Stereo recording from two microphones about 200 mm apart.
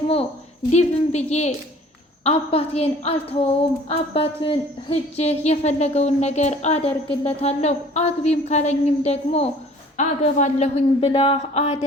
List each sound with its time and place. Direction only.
0.7 s a woman's voice: 35° left (ahead or behind)